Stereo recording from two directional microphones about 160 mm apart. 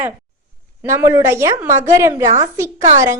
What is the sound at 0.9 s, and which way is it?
A woman's voice, 15° right (ahead or behind).